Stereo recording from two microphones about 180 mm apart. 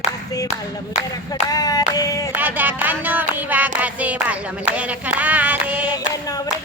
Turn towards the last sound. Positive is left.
turn(degrees=-10)  # may be behind; listen again after turning